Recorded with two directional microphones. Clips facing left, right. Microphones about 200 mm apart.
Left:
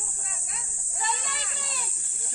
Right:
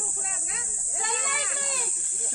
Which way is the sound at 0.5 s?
65° right (ahead or behind).